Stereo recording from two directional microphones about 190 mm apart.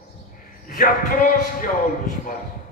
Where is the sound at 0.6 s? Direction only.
45° left (ahead or behind).